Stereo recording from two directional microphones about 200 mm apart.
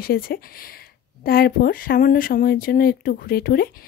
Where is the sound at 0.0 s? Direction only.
50° left (ahead or behind).